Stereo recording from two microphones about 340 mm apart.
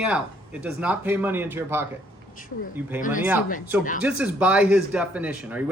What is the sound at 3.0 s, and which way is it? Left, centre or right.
Speech, left.